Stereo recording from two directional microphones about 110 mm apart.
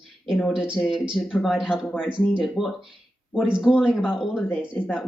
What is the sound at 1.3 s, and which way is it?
Speech, centre (ahead or behind).